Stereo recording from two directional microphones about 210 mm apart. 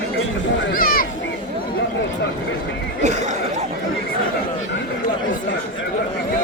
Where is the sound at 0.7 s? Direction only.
45° left (ahead or behind).